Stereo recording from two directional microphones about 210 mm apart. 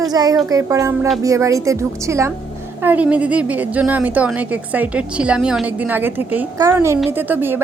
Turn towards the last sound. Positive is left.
turn(degrees=-10)  # may be behind; listen again after turning